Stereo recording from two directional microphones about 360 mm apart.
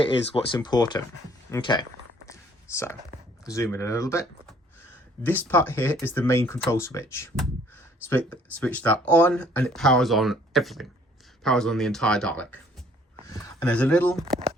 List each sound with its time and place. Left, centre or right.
0.0 s speech: centre
2.2 s a sound: centre
3.5 s speech: centre
14.3 s speech: centre